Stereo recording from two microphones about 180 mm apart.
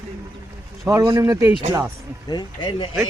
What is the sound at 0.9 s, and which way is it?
Speech, 15° right (ahead or behind).